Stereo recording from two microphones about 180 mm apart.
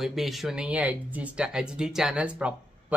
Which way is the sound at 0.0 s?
Centre (ahead or behind).